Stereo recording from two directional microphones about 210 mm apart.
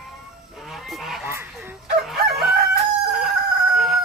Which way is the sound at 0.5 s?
Centre (ahead or behind).